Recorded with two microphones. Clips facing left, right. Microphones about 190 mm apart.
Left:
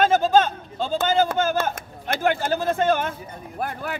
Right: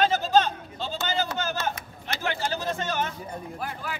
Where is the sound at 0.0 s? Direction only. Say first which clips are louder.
Left 4 dB; 50° left (ahead or behind).